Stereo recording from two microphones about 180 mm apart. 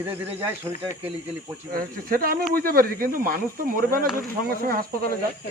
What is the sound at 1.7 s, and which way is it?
Speech, 55° right (ahead or behind).